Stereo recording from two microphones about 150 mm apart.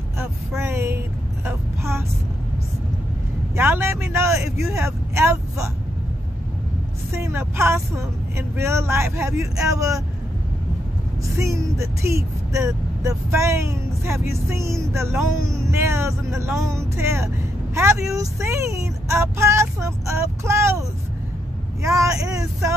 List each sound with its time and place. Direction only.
0.6 s vehicle: 15° right (ahead or behind)
3.5 s speech: 15° right (ahead or behind)
7.1 s speech: 15° right (ahead or behind)
11.3 s speech: 20° right (ahead or behind)
21.8 s speech: 20° right (ahead or behind)